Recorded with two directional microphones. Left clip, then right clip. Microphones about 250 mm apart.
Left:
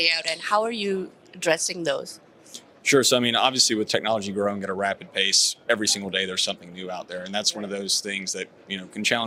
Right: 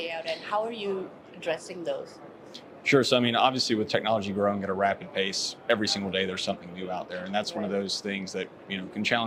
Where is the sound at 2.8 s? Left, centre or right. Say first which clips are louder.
Left 3 dB; left.